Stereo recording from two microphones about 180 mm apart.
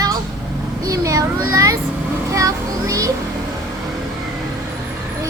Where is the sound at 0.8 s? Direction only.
20° right (ahead or behind).